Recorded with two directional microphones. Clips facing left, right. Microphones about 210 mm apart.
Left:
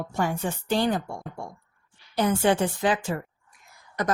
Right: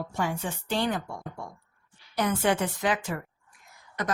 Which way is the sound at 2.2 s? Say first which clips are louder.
Left 3 dB; 30° left (ahead or behind).